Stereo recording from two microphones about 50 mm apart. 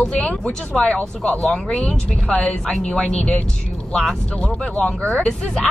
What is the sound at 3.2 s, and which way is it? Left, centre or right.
Speech, left.